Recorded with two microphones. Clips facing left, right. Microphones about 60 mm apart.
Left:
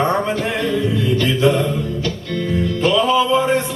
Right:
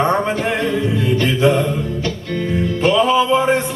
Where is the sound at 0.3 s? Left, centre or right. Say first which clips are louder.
Right 1 dB; right.